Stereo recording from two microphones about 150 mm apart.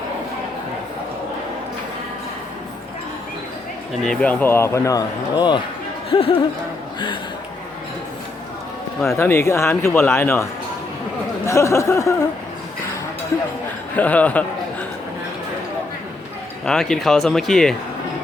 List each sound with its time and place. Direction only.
4.0 s speech: 5° left (ahead or behind); by 6.3 s 40° left (ahead or behind)
9.1 s speech: 15° left (ahead or behind)
13.9 s a man's voice: 10° left (ahead or behind)
16.6 s speech: 5° left (ahead or behind)